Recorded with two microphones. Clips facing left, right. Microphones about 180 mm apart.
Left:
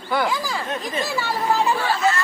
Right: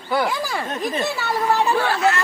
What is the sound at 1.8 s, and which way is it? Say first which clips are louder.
Speech: right 2 dB; 65° right (ahead or behind).